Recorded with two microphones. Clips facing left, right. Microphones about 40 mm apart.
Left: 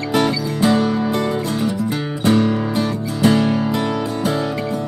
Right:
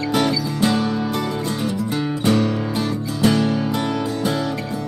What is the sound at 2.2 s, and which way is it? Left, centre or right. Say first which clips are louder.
Music: left 4 dB; centre.